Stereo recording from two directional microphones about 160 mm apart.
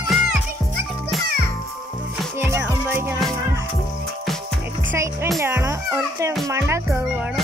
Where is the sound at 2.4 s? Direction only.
15° right (ahead or behind).